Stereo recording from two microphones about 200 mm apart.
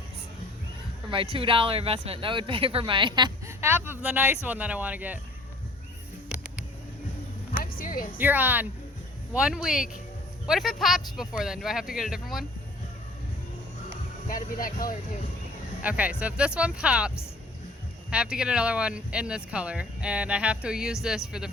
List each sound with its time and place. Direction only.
1.1 s speech: 25° right (ahead or behind); by 5.2 s 10° right (ahead or behind)
7.5 s a sound: 45° left (ahead or behind)
8.2 s speech: 10° right (ahead or behind)
14.3 s speech: 45° left (ahead or behind)
15.8 s speech: 5° right (ahead or behind)
18.1 s speech: 5° right (ahead or behind)